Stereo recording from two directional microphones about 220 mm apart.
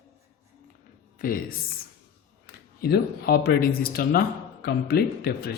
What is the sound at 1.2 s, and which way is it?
Speech, 40° left (ahead or behind).